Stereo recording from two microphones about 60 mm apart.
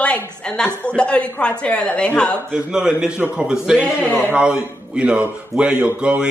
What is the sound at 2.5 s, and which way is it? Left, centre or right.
A man's voice, centre.